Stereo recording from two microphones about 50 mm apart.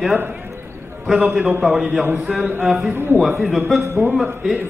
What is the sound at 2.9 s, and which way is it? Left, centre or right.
Speech, right.